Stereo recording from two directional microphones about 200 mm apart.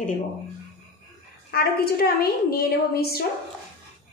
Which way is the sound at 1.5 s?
50° left (ahead or behind).